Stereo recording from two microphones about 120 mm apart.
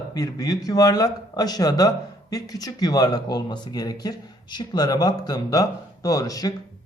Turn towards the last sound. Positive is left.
turn(degrees=30)  # may be behind; listen again after turning